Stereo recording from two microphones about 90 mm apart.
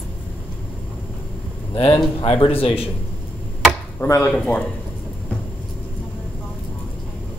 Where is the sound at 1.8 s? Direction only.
90° left.